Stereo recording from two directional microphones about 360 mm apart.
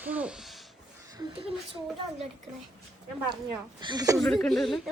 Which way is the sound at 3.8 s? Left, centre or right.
Centre.